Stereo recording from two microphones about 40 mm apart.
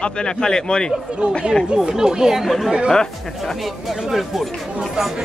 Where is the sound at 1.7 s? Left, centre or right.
Centre.